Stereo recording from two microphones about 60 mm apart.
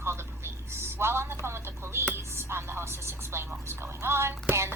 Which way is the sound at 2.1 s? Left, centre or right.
Right.